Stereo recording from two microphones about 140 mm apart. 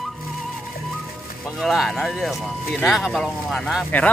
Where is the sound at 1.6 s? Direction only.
Centre (ahead or behind).